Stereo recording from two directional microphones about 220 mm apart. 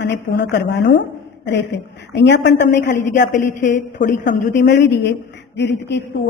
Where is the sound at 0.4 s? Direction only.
50° left (ahead or behind).